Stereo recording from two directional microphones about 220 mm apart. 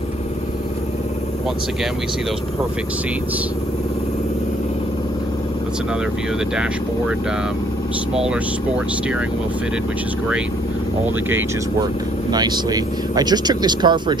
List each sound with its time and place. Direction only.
12.3 s speech: 20° right (ahead or behind)